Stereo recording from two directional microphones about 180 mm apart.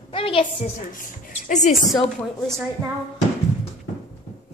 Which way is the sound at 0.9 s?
50° left (ahead or behind).